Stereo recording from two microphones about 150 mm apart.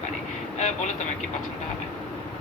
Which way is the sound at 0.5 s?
50° left (ahead or behind).